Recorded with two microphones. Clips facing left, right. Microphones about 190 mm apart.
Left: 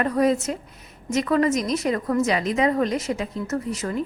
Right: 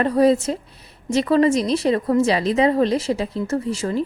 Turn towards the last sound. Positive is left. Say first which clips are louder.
# right 4 dB
turn(degrees=-30)  # may be behind; listen again after turning